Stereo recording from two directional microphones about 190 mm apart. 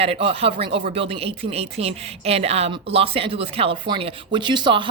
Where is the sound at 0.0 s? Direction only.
30° right (ahead or behind).